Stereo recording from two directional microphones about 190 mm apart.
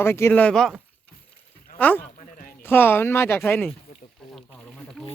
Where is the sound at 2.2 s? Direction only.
45° left (ahead or behind).